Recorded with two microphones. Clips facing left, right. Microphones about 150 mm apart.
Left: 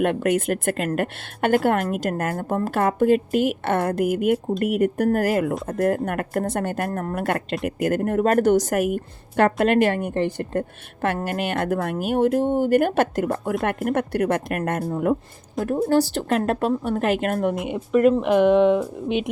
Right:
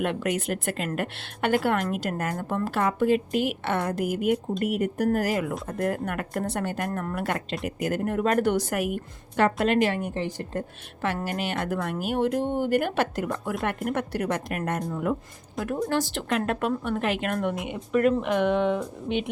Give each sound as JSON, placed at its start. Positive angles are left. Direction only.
{"t": 0.0, "sound": "a woman's voice", "side_deg": 50}
{"t": 15.6, "sound": "speech", "side_deg": 35}
{"t": 17.5, "sound": "speech", "side_deg": 0}